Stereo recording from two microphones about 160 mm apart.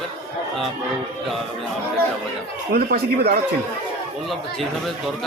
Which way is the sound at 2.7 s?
70° right (ahead or behind).